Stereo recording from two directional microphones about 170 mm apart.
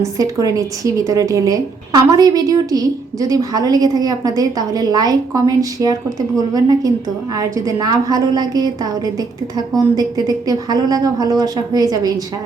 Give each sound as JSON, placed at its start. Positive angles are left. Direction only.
{"t": 0.0, "sound": "a woman's voice", "side_deg": -20}